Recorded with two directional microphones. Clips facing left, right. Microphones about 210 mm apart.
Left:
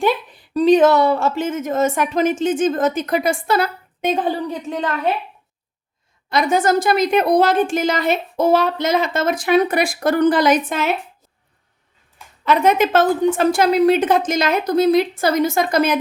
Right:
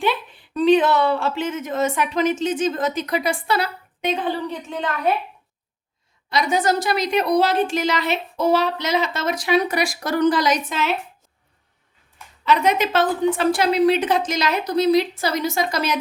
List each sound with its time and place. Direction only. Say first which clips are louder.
0.0 s a woman's voice: left 4 dB; 40° left (ahead or behind)
6.3 s a woman's voice: left 4 dB; 50° left (ahead or behind)
12.5 s a woman's voice: left 4 dB; 50° left (ahead or behind)